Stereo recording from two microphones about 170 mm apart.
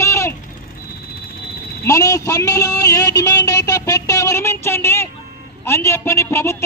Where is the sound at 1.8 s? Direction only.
20° left (ahead or behind).